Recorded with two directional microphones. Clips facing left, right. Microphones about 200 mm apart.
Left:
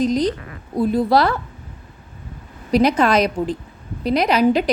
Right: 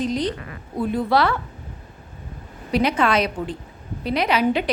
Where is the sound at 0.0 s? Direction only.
40° left (ahead or behind).